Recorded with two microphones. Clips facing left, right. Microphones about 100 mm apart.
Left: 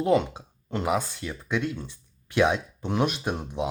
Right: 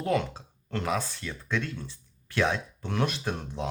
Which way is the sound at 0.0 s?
20° left (ahead or behind).